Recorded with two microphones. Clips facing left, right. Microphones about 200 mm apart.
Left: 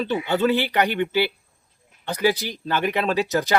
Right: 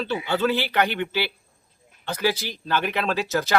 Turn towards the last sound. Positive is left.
turn(degrees=15)  # may be behind; listen again after turning